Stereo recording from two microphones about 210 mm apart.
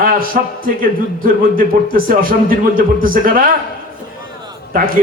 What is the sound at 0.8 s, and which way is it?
Speech, 40° right (ahead or behind).